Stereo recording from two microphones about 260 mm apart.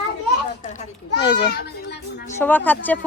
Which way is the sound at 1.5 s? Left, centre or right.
Left.